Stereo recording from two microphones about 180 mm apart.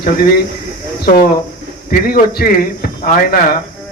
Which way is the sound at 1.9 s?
55° left (ahead or behind).